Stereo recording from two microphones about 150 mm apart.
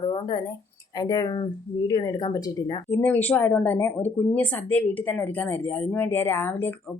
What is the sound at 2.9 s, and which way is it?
Speech, 10° left (ahead or behind).